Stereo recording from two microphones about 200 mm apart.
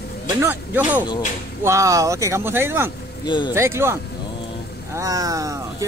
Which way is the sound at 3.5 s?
15° right (ahead or behind).